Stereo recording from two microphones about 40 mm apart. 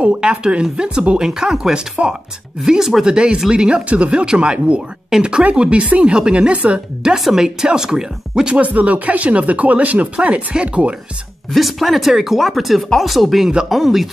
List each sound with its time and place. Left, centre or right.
0.0 s a woman's voice: right
2.0 s speech: right
2.6 s a woman's voice: centre; by 6.8 s right
7.2 s speech: centre
8.5 s speech: right
10.1 s a woman's voice: right
11.5 s speech: centre